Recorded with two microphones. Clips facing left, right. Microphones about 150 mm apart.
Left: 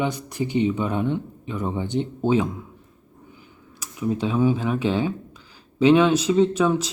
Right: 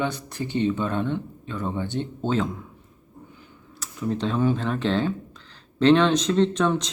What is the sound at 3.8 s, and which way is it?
Speech, 10° left (ahead or behind).